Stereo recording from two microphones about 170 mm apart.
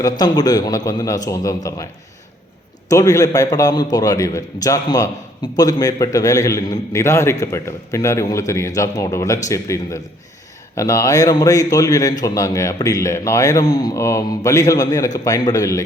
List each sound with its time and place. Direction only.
0.0 s a man's voice: 20° left (ahead or behind)
2.9 s a man's voice: 20° left (ahead or behind)